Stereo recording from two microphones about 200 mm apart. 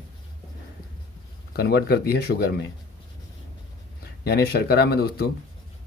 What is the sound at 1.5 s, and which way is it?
A man's voice, 55° left (ahead or behind).